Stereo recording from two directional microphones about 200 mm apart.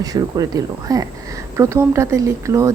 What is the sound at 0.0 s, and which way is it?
Speech, 20° right (ahead or behind).